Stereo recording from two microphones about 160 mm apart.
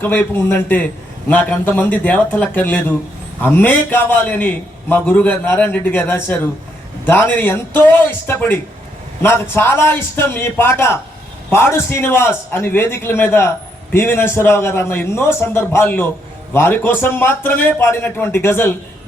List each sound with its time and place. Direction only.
0.0 s a man's voice: 10° left (ahead or behind)